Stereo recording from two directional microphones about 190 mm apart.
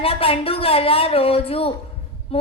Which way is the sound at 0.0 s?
30° left (ahead or behind).